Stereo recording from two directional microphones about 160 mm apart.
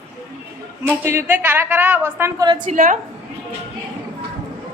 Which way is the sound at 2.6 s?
55° right (ahead or behind).